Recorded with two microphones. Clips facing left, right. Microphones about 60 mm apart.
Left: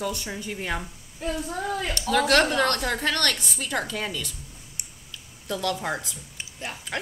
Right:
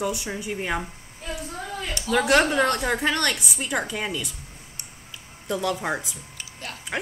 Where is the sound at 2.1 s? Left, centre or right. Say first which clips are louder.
Right 1 dB; centre.